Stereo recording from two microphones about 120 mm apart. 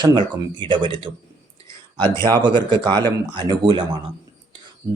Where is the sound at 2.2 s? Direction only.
40° right (ahead or behind).